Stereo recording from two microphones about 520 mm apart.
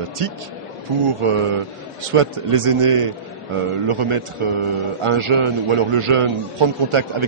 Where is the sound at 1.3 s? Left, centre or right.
Right.